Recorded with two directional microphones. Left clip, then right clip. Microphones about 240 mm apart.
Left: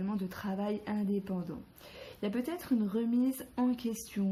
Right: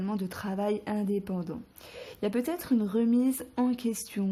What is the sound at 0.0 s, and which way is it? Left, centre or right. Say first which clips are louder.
Speech: right 4 dB; right.